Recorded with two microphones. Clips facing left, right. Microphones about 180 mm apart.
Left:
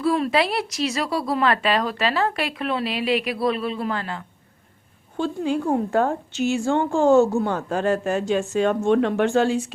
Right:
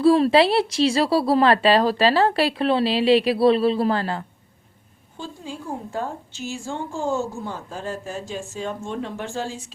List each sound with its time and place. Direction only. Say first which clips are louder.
0.0 s a woman's voice: right 5 dB; 30° right (ahead or behind)
5.1 s a woman's voice: left 11 dB; 65° left (ahead or behind)